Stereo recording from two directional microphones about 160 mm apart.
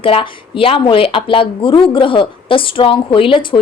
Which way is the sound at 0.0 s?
35° left (ahead or behind).